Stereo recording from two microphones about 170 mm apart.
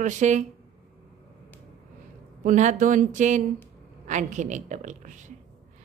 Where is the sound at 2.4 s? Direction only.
45° right (ahead or behind).